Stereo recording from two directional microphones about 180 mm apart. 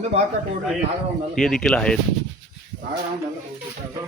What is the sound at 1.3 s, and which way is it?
Speech, centre (ahead or behind).